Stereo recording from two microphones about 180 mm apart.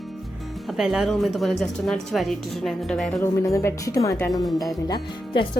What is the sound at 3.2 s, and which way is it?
Speech, 15° left (ahead or behind).